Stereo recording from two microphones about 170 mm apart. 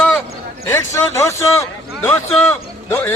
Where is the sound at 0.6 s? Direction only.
15° left (ahead or behind).